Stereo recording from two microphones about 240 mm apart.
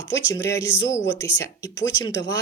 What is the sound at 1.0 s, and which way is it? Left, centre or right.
Speech, left.